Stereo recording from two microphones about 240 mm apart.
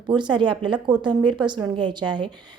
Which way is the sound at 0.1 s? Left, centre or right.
Centre.